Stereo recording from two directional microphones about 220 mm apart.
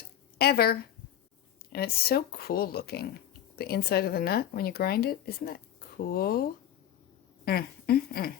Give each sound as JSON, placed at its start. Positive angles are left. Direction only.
{"t": 0.3, "sound": "speech", "side_deg": 45}
{"t": 7.4, "sound": "speech", "side_deg": 45}